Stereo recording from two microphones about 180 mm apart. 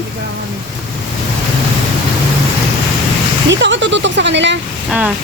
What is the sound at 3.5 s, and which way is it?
Speech, 90° right.